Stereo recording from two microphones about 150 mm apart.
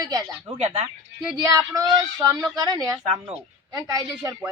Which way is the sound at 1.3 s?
25° right (ahead or behind).